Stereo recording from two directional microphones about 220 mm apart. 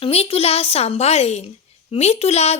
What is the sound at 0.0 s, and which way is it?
A woman's voice, 25° left (ahead or behind).